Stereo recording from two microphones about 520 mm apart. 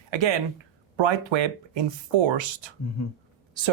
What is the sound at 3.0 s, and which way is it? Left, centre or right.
Speech, left.